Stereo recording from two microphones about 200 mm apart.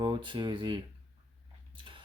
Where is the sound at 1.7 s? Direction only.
25° right (ahead or behind).